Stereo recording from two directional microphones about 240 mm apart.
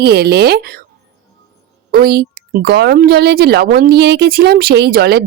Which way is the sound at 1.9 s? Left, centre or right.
Right.